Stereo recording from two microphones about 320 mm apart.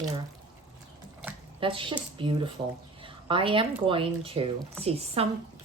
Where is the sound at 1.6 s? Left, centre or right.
Centre.